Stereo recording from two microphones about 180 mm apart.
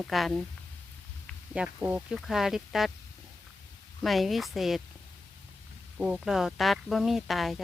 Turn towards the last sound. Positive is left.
turn(degrees=0)  # may be behind; listen again after turning